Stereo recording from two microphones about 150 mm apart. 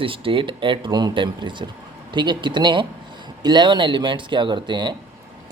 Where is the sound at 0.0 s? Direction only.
35° right (ahead or behind).